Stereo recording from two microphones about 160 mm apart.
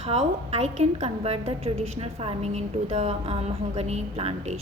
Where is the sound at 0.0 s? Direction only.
40° right (ahead or behind).